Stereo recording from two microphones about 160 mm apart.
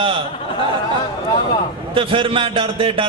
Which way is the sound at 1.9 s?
35° right (ahead or behind).